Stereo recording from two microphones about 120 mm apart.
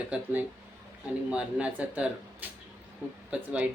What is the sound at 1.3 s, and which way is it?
Speech, 10° right (ahead or behind).